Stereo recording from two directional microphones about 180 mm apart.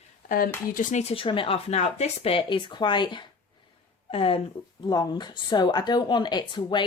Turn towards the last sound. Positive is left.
turn(degrees=25)  # may be behind; listen again after turning